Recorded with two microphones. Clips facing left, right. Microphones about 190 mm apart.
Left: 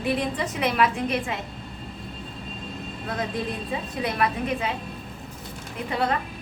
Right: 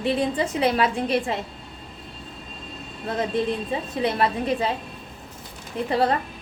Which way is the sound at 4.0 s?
30° right (ahead or behind).